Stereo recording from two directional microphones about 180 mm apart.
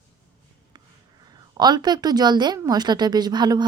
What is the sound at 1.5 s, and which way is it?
A woman's voice, 25° right (ahead or behind).